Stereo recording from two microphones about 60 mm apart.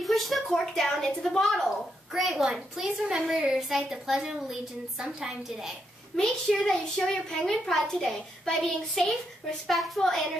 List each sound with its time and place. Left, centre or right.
0.0 s a woman's voice: centre
2.1 s a woman's voice: centre
6.1 s a child's voice: centre